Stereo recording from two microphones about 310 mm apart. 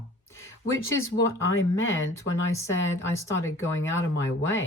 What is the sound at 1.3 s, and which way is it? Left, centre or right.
Speech, left.